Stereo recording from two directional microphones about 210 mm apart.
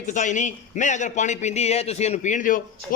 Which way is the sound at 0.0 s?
35° left (ahead or behind).